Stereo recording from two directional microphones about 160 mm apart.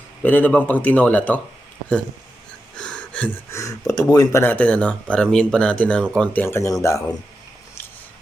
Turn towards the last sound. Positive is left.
turn(degrees=20)  # may be behind; listen again after turning